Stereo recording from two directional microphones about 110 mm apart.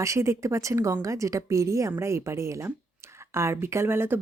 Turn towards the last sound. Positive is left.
turn(degrees=-20)  # may be behind; listen again after turning